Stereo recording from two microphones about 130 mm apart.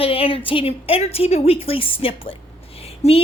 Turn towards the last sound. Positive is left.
turn(degrees=55)  # may be behind; listen again after turning